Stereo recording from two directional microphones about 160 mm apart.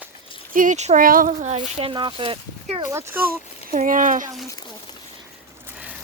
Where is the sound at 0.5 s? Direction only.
55° right (ahead or behind).